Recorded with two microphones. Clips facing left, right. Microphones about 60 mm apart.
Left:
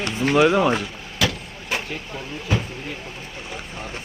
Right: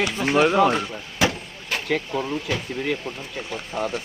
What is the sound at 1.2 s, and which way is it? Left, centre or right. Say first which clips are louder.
Vehicle: right 2 dB; right.